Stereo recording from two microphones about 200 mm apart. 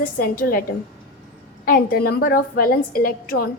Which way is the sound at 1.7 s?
50° left (ahead or behind).